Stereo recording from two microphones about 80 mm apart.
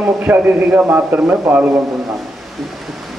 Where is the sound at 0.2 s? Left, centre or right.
Right.